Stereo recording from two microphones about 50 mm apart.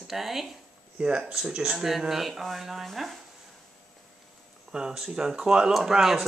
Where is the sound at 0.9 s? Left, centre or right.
Right.